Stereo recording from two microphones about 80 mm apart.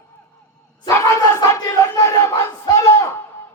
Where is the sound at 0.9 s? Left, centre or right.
Left.